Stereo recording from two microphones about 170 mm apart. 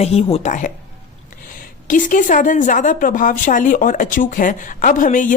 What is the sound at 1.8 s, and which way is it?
A woman's voice, 50° left (ahead or behind).